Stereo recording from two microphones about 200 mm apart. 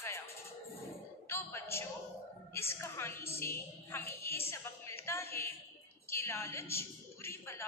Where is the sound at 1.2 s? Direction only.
10° left (ahead or behind).